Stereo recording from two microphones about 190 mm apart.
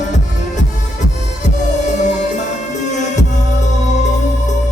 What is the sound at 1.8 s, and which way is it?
Music, 40° left (ahead or behind).